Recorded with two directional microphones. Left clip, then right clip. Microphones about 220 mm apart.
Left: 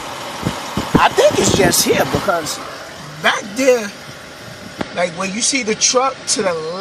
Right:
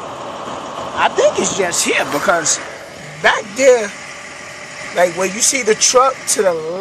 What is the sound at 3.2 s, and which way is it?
Speech, centre (ahead or behind).